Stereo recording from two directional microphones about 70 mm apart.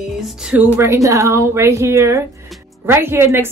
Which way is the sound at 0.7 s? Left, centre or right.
Right.